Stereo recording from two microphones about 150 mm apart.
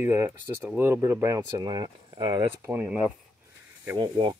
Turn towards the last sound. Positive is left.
turn(degrees=-30)  # may be behind; listen again after turning